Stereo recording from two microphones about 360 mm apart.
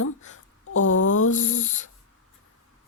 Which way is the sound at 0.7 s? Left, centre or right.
Left.